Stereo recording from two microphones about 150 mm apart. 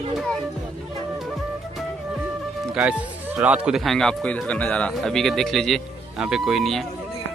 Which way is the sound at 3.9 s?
5° left (ahead or behind).